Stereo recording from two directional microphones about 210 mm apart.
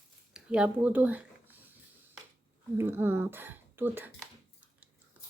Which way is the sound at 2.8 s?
10° right (ahead or behind).